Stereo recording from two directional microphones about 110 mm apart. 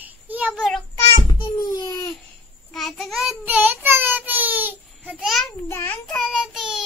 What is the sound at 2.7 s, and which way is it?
Child singing, centre (ahead or behind).